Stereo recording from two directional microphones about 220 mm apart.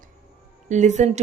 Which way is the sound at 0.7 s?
35° right (ahead or behind).